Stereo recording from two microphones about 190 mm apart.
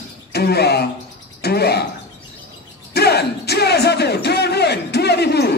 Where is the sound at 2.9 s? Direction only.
60° left (ahead or behind).